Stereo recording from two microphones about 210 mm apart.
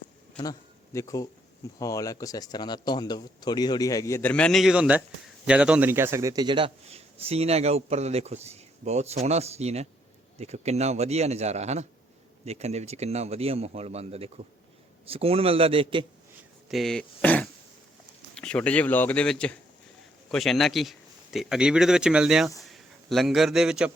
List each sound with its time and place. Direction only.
0.9 s a man's voice: 15° left (ahead or behind); by 16.0 s 25° right (ahead or behind)
16.6 s a man's voice: centre (ahead or behind)